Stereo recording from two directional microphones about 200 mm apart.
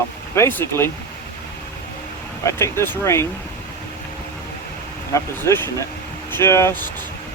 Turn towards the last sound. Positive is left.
turn(degrees=10)  # may be behind; listen again after turning